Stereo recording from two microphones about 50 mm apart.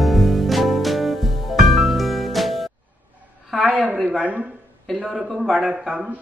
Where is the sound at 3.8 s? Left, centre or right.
Right.